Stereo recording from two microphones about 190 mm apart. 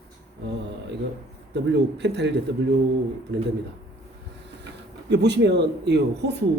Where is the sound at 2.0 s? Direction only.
65° right (ahead or behind).